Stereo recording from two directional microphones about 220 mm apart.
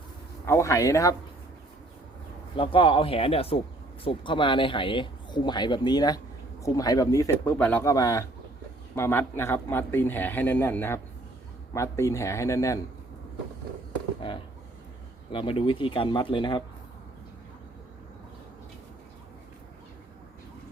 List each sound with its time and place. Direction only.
0.4 s a man's voice: 10° left (ahead or behind)
2.6 s a man's voice: 20° left (ahead or behind)
14.2 s speech: 25° left (ahead or behind)